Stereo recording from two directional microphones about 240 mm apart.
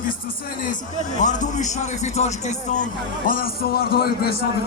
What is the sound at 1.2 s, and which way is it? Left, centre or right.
A man's voice, left.